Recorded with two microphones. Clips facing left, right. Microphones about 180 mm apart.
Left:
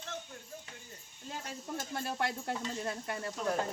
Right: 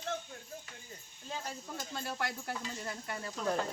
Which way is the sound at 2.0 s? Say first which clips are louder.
Left 3 dB; 25° left (ahead or behind).